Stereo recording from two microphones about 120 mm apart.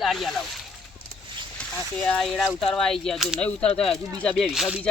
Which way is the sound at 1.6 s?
10° left (ahead or behind).